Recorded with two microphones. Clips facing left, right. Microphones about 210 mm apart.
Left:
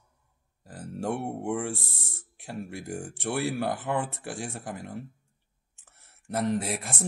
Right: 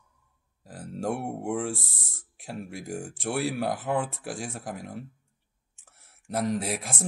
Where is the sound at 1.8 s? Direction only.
65° left (ahead or behind).